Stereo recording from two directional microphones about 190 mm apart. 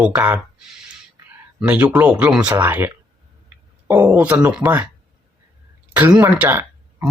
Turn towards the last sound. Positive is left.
turn(degrees=-10)  # may be behind; listen again after turning